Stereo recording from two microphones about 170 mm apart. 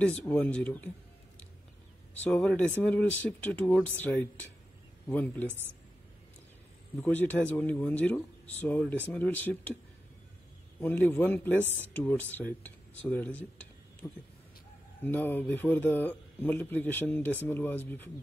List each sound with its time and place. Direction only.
0.0 s speech: 10° left (ahead or behind)
2.2 s speech: 5° left (ahead or behind)
7.0 s speech: 10° left (ahead or behind)
10.8 s speech: 10° left (ahead or behind)
15.0 s speech: 10° left (ahead or behind)